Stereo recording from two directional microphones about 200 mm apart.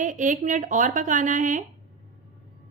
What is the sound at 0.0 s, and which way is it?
A woman's voice, 40° right (ahead or behind).